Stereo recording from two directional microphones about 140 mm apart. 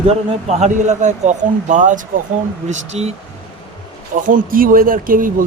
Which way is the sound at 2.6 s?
55° right (ahead or behind).